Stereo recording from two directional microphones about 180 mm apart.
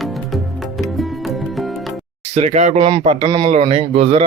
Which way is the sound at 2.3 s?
40° right (ahead or behind).